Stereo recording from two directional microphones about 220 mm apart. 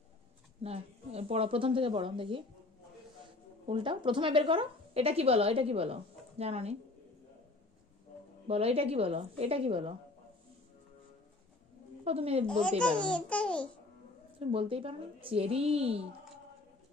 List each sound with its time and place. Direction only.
0.6 s a woman's voice: 25° right (ahead or behind)
3.6 s a woman's voice: 25° right (ahead or behind)
8.5 s a woman's voice: 25° right (ahead or behind)
12.0 s speech: 25° right (ahead or behind)
12.4 s speech: 5° left (ahead or behind)
14.5 s a woman's voice: 25° right (ahead or behind)